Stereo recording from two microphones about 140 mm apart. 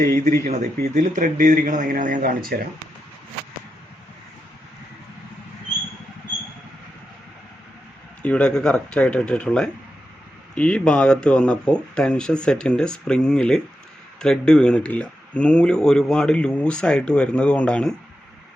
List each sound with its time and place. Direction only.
0.4 s speech: 75° right (ahead or behind); by 2.6 s 90° right
8.2 s speech: 10° left (ahead or behind)